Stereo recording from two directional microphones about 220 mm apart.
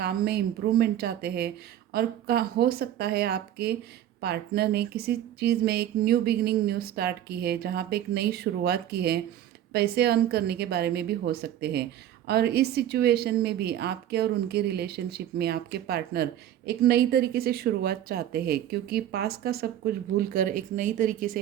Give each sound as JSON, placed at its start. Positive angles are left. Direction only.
{"t": 0.0, "sound": "speech", "side_deg": -45}